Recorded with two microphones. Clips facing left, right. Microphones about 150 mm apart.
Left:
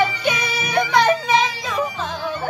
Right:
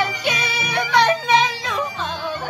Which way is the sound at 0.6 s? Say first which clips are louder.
Left 1 dB; 10° left (ahead or behind).